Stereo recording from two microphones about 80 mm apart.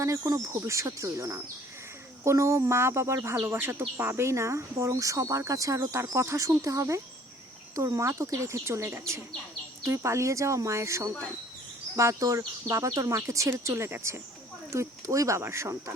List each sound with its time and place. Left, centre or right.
0.3 s speech: right